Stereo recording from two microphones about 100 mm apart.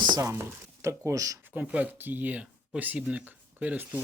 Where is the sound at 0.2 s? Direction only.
25° right (ahead or behind).